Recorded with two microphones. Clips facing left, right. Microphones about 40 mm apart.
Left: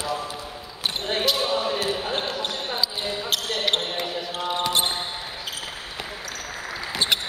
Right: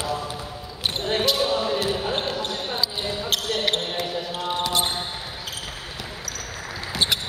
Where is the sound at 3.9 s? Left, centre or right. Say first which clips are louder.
Right 1 dB; centre.